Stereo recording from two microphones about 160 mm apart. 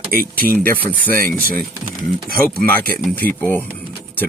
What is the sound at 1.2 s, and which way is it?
Speech, 65° right (ahead or behind).